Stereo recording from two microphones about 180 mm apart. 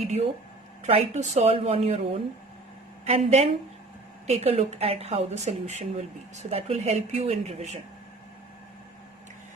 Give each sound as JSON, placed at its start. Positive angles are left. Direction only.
{"t": 0.9, "sound": "speech", "side_deg": -35}